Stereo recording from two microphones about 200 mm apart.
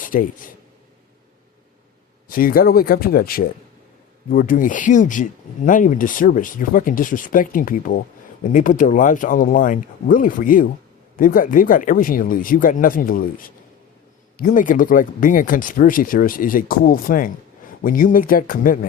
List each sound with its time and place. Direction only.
0.0 s speech: 45° left (ahead or behind)
2.3 s speech: 45° left (ahead or behind)